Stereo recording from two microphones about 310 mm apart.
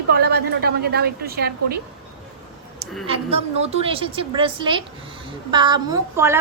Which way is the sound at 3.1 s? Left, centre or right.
Centre.